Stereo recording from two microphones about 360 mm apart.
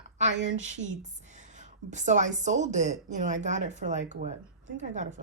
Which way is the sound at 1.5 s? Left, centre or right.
Centre.